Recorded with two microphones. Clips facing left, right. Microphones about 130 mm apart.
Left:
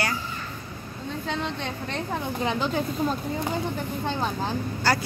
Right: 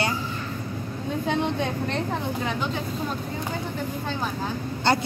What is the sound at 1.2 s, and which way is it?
Speech, 15° right (ahead or behind).